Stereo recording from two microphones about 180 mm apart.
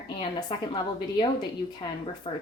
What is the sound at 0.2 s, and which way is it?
Speech, 25° left (ahead or behind).